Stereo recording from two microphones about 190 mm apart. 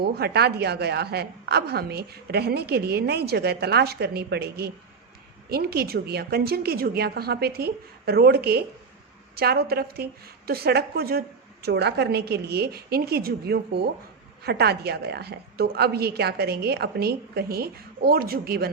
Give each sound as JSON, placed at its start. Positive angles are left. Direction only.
{"t": 0.0, "sound": "a woman's voice", "side_deg": -55}